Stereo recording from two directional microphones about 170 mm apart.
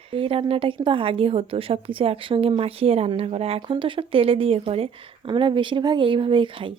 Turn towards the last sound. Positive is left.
turn(degrees=-30)  # may be behind; listen again after turning